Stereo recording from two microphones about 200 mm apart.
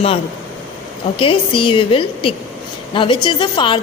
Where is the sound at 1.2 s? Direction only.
25° left (ahead or behind).